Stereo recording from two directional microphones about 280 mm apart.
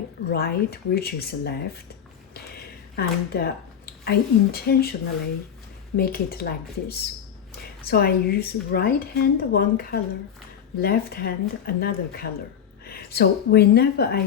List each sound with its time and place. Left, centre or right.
0.3 s speech: left
2.9 s speech: left
6.0 s speech: left